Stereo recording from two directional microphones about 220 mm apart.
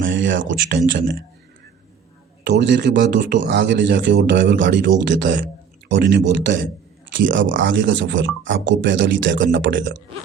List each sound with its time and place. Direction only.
0.0 s speech: 55° right (ahead or behind)
2.4 s speech: 55° right (ahead or behind)